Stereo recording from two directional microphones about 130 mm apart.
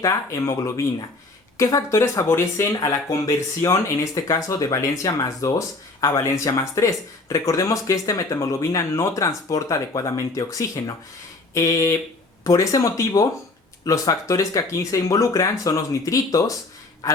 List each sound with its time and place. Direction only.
0.0 s speech: 25° left (ahead or behind)